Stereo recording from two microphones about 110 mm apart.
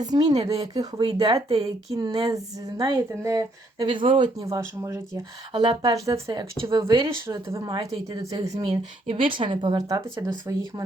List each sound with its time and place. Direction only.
0.0 s a woman's voice: 40° right (ahead or behind)
1.0 s speech: 55° right (ahead or behind)
2.0 s a woman's voice: 35° right (ahead or behind)
4.4 s speech: 30° right (ahead or behind)
5.5 s a woman's voice: 40° right (ahead or behind); by 7.6 s 25° right (ahead or behind)
8.6 s a woman's voice: 60° right (ahead or behind)
9.7 s a woman's voice: 35° right (ahead or behind)